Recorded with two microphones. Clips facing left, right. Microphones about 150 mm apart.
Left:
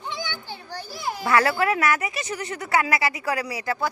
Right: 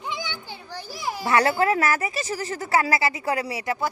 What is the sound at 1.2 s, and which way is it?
Speech, 25° right (ahead or behind).